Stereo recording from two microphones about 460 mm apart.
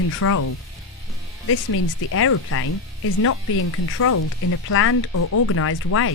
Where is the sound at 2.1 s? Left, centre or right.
Left.